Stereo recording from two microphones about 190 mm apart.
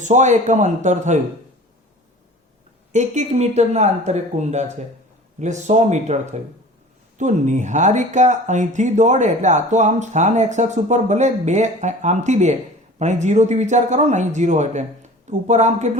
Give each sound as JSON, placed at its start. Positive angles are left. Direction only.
{"t": 0.0, "sound": "speech", "side_deg": -40}
{"t": 2.9, "sound": "speech", "side_deg": -40}
{"t": 7.2, "sound": "speech", "side_deg": -40}